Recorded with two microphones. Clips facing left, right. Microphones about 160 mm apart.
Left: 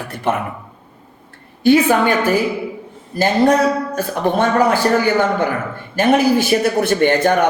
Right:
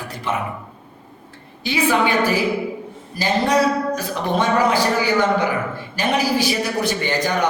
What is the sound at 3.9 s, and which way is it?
A woman's voice, 50° left (ahead or behind).